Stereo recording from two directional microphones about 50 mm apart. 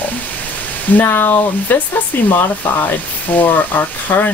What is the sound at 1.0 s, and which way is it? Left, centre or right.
Speech, left.